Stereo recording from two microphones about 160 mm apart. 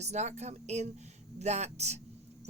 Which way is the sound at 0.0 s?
45° right (ahead or behind).